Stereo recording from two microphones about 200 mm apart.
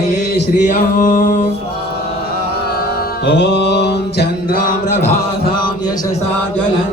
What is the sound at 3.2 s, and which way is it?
Mantra, 60° left (ahead or behind).